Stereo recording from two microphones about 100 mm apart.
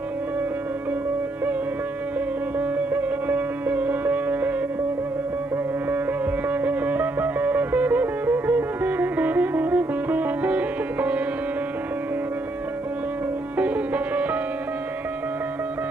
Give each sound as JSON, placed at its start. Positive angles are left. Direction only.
{"t": 2.9, "sound": "sitar", "side_deg": -15}
{"t": 6.5, "sound": "music", "side_deg": -15}
{"t": 13.6, "sound": "music", "side_deg": -15}